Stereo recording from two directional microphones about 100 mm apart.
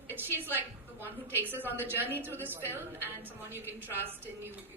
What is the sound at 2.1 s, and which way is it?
Speech, 20° right (ahead or behind).